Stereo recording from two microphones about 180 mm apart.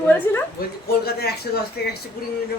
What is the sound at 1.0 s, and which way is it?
Speech, 60° left (ahead or behind).